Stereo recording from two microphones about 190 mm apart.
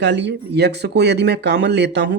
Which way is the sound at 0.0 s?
65° right (ahead or behind).